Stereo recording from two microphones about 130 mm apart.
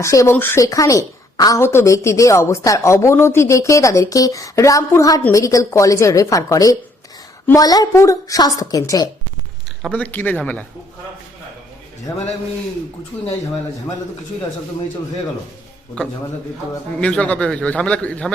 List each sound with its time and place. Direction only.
0.0 s a woman's voice: 25° left (ahead or behind)
9.8 s a man's voice: 10° left (ahead or behind)
17.0 s a man's voice: 10° left (ahead or behind)